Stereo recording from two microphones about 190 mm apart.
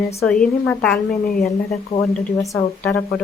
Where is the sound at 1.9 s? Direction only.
25° left (ahead or behind).